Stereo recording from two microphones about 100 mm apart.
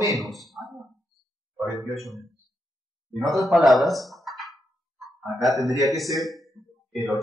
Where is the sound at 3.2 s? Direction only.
Centre (ahead or behind).